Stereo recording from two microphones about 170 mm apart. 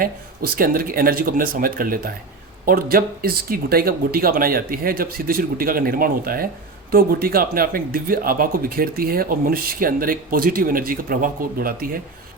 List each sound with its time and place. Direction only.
0.0 s speech: 55° right (ahead or behind)